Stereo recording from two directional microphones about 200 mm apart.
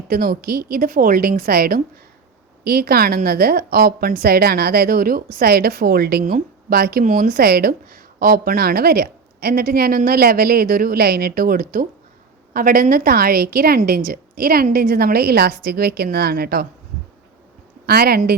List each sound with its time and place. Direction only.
0.1 s a woman's voice: 50° right (ahead or behind)
17.8 s a woman's voice: 50° right (ahead or behind)